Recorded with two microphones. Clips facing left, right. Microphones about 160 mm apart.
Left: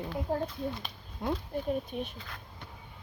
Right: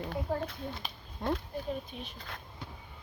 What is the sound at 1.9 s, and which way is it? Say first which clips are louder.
Speech: left 8 dB; 50° left (ahead or behind).